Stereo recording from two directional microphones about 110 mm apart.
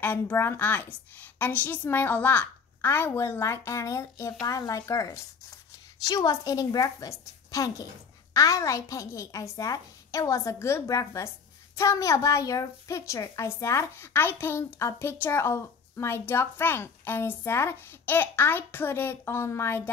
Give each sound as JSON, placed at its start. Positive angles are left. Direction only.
{"t": 0.0, "sound": "a woman's voice", "side_deg": 20}